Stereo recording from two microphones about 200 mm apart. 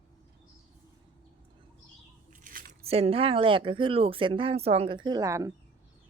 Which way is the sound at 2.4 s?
45° right (ahead or behind).